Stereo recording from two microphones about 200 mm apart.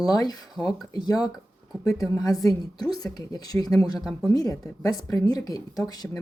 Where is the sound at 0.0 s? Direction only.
20° left (ahead or behind).